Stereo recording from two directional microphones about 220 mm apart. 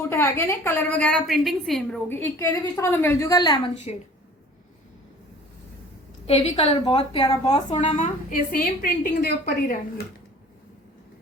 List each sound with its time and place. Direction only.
0.1 s a woman's voice: 10° left (ahead or behind)
6.2 s a woman's voice: 25° left (ahead or behind)
7.7 s a woman's voice: 30° left (ahead or behind)